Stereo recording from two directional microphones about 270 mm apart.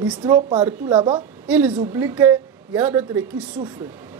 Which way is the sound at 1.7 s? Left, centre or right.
Centre.